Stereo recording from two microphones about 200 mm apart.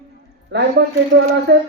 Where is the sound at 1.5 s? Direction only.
55° right (ahead or behind).